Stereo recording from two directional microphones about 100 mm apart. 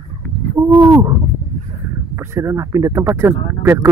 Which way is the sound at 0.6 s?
25° right (ahead or behind).